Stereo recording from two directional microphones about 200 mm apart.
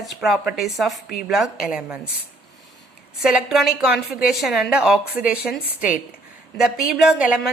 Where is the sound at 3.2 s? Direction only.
5° right (ahead or behind).